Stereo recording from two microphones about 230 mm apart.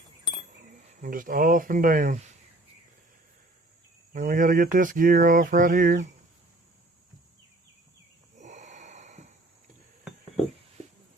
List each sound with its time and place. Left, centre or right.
1.0 s speech: right
4.1 s speech: right
8.4 s snort: right